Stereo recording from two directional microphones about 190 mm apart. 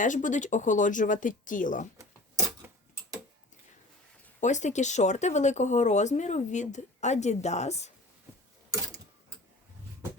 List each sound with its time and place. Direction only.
0.0 s speech: 40° left (ahead or behind)
2.0 s a sound: 15° right (ahead or behind)
4.4 s speech: 40° left (ahead or behind)